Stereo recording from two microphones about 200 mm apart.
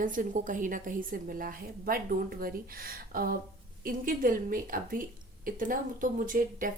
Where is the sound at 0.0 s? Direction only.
40° right (ahead or behind).